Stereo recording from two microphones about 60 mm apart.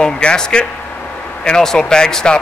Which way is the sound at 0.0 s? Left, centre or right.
Centre.